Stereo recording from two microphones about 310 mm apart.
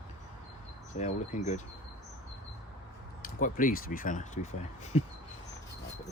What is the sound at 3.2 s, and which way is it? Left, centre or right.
Speech, left.